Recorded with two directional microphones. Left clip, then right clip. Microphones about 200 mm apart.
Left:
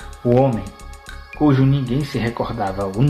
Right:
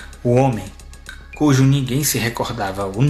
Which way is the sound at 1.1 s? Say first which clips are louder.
Even; 10° right (ahead or behind).